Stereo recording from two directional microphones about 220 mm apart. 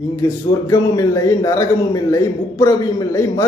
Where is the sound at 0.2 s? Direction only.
15° left (ahead or behind).